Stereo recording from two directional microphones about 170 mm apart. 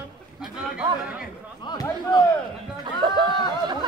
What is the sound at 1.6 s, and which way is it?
Speech, 25° left (ahead or behind).